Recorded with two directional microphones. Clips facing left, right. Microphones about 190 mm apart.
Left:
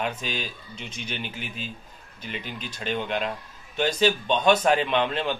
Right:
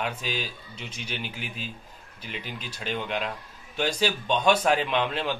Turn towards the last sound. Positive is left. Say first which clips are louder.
# left 2 dB
turn(degrees=-5)  # may be behind; listen again after turning